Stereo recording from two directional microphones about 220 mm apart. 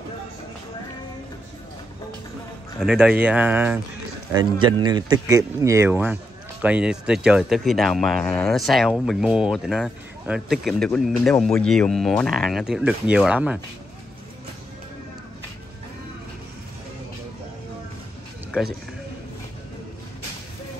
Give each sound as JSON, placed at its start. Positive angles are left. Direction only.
{"t": 2.8, "sound": "speech", "side_deg": -5}
{"t": 4.3, "sound": "speech", "side_deg": -20}